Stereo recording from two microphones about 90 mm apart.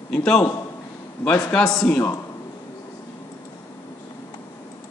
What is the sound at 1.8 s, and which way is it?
Speech, 20° left (ahead or behind).